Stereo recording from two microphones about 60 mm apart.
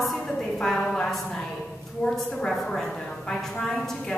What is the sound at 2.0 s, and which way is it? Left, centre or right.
A woman's voice, centre.